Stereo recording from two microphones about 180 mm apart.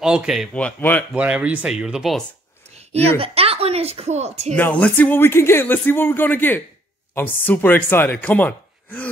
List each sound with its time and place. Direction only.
0.0 s speech: 5° right (ahead or behind)
1.1 s speech: 5° right (ahead or behind)
2.9 s speech: 35° right (ahead or behind)
4.6 s speech: 10° left (ahead or behind)